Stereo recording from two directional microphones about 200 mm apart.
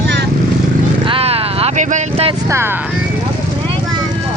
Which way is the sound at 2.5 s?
10° right (ahead or behind).